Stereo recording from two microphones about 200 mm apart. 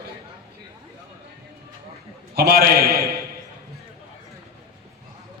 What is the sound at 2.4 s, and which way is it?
Speech, 50° right (ahead or behind).